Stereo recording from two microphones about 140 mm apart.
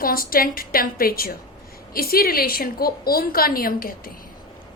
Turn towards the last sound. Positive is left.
turn(degrees=90)